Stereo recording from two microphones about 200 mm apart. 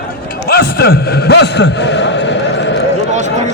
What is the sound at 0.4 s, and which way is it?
A man's voice, 50° left (ahead or behind).